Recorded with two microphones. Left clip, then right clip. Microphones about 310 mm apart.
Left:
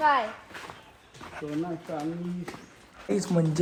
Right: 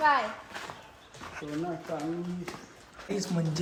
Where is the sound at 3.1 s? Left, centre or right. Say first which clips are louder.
Left 6 dB; centre.